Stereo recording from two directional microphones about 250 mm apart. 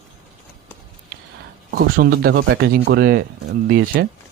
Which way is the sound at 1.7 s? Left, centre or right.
Right.